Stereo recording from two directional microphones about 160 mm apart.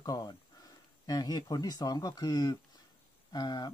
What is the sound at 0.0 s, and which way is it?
Speech, 25° left (ahead or behind).